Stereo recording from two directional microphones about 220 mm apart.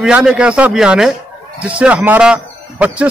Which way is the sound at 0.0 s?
5° right (ahead or behind).